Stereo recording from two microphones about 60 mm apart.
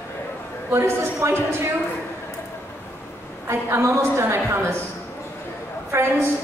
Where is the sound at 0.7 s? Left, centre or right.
Right.